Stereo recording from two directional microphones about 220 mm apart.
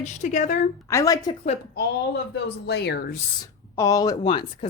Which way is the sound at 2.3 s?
50° left (ahead or behind).